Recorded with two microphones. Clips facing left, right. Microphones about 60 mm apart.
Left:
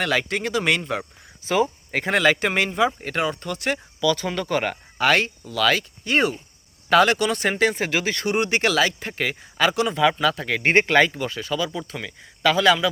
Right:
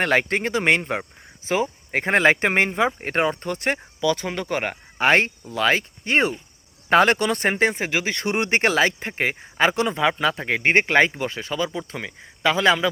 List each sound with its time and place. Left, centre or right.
0.0 s speech: right